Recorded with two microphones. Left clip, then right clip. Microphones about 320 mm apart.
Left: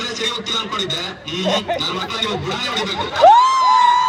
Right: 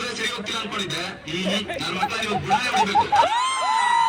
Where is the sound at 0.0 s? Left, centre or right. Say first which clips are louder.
Left 5 dB; centre.